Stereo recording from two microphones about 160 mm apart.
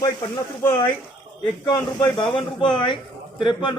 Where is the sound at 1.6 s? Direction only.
25° left (ahead or behind).